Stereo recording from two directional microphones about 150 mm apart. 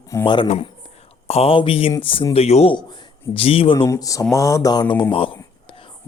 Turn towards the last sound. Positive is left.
turn(degrees=35)  # may be behind; listen again after turning